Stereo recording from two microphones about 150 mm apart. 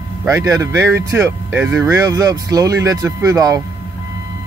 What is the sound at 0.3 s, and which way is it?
Speech, 20° right (ahead or behind).